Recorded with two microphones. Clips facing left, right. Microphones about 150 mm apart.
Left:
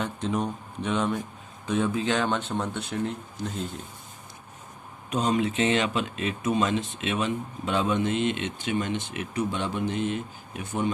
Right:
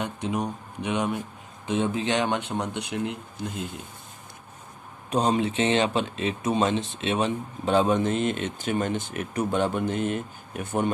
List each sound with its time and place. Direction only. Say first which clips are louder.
0.0 s speech: even; 10° right (ahead or behind)
5.1 s speech: right 2 dB; 30° right (ahead or behind); by 10.9 s 55° right (ahead or behind)